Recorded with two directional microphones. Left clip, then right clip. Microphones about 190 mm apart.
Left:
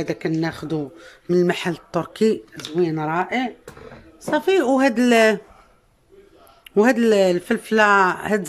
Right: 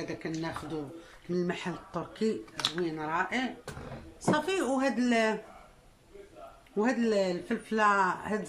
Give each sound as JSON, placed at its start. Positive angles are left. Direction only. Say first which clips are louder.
{"t": 0.0, "sound": "speech", "louder": "left 12 dB", "side_deg": 60}
{"t": 6.8, "sound": "speech", "louder": "left 12 dB", "side_deg": 60}